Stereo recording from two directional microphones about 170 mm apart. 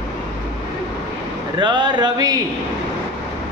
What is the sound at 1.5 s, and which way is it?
Speech, 25° right (ahead or behind).